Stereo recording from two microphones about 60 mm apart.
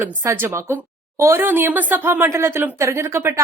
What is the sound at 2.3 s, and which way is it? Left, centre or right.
Speech, right.